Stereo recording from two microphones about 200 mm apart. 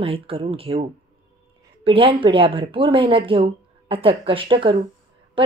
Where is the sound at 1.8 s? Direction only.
25° right (ahead or behind).